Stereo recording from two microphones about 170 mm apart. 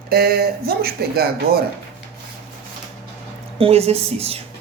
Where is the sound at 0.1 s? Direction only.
65° right (ahead or behind).